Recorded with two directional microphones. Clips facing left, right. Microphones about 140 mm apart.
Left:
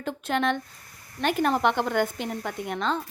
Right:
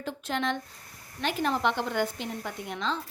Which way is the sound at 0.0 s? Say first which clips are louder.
Left 5 dB; 55° left (ahead or behind).